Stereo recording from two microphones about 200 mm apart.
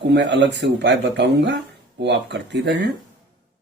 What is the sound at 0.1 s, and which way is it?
Speech, 60° right (ahead or behind).